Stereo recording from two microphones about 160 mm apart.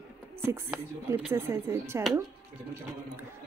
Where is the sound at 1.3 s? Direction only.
15° right (ahead or behind).